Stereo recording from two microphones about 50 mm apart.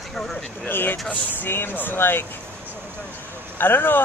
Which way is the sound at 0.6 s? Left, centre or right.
Left.